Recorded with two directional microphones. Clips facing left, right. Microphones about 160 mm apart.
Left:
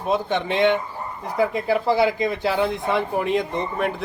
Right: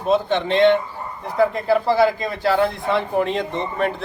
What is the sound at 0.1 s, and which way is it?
Speech, 15° left (ahead or behind).